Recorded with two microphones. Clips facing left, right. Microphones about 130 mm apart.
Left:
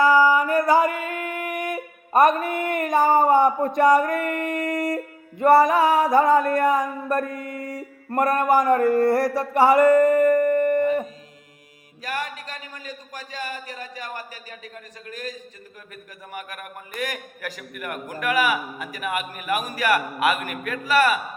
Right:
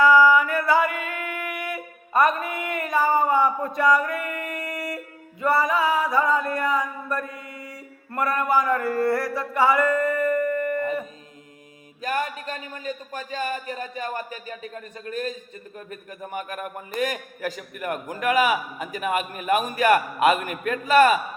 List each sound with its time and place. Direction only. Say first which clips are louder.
0.0 s singing: right 1 dB; 40° left (ahead or behind)
9.0 s music: left 4 dB; 40° left (ahead or behind)
12.1 s a sound: right 3 dB; 30° right (ahead or behind)
15.1 s a man's voice: right 8 dB; 30° right (ahead or behind)
16.2 s a man's voice: right 5 dB; 35° right (ahead or behind)